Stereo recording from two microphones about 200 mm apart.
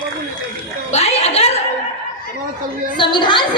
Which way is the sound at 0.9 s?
30° left (ahead or behind).